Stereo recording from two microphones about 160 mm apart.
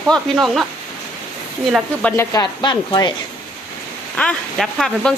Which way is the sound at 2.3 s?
25° left (ahead or behind).